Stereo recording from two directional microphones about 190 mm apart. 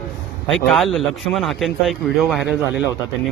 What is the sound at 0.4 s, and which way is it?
Speech, 5° left (ahead or behind).